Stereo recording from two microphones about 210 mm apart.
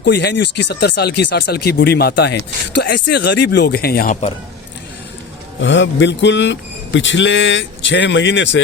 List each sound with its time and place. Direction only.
0.0 s speech: 55° left (ahead or behind); by 4.3 s 40° left (ahead or behind)
5.6 s speech: 60° left (ahead or behind)